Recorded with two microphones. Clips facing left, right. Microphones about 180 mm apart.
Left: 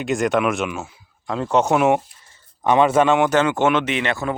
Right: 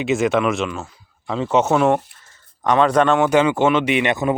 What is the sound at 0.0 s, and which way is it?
Speech, centre (ahead or behind).